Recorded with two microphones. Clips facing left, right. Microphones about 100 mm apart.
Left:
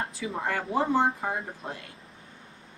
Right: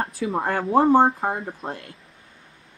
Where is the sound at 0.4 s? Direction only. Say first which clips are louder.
Right 8 dB; 40° right (ahead or behind).